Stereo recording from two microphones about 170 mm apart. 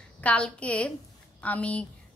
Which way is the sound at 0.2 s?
10° left (ahead or behind).